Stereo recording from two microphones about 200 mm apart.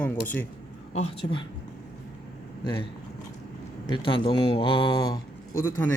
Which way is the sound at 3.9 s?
25° left (ahead or behind).